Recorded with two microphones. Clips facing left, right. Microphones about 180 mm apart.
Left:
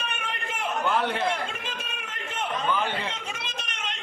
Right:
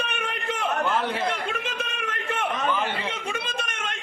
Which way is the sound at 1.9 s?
65° right (ahead or behind).